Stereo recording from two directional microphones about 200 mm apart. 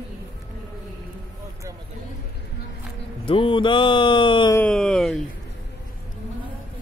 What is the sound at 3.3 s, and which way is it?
Speech, 25° left (ahead or behind).